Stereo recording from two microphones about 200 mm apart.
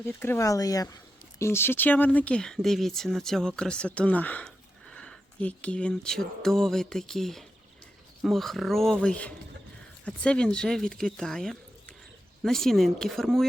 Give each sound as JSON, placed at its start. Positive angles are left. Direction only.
{"t": 0.0, "sound": "speech", "side_deg": 10}